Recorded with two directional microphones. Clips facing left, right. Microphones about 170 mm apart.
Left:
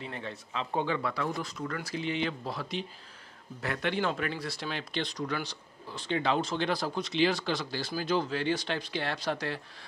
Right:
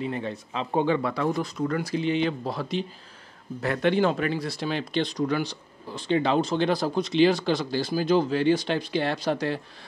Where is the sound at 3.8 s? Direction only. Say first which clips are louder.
Right 8 dB; 25° right (ahead or behind).